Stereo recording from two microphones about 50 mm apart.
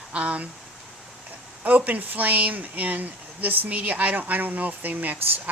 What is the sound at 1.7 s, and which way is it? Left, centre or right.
Speech, right.